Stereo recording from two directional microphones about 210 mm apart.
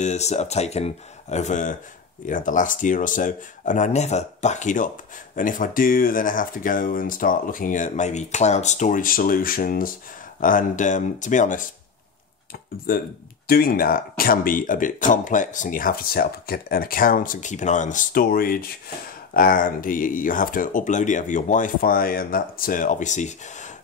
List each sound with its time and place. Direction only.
0.0 s speech: 35° left (ahead or behind)
12.9 s speech: 45° left (ahead or behind)